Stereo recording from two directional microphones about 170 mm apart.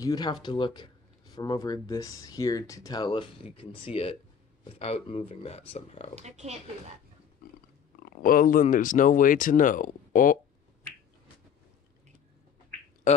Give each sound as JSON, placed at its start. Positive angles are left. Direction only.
{"t": 0.0, "sound": "speech", "side_deg": 25}
{"t": 6.1, "sound": "speech", "side_deg": -40}
{"t": 8.0, "sound": "speech", "side_deg": 55}